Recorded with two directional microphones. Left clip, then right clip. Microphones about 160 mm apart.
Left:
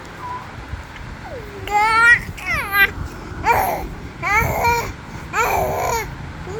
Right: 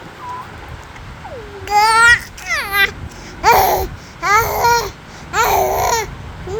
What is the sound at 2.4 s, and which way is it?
Babbling, 20° right (ahead or behind).